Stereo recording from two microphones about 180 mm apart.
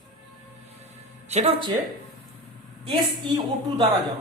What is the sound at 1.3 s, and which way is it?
Speech, 35° right (ahead or behind).